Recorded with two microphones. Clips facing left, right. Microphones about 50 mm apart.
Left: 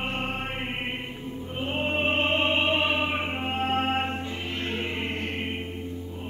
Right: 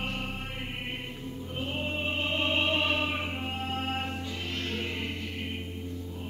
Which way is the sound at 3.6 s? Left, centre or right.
Left.